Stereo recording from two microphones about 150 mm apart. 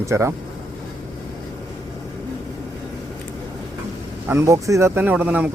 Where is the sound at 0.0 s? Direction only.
20° right (ahead or behind).